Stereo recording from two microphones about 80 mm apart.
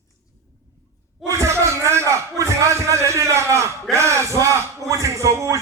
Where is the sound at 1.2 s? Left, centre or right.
Right.